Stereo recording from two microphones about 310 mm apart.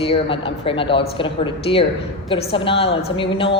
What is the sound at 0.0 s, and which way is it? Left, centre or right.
A woman's voice, centre.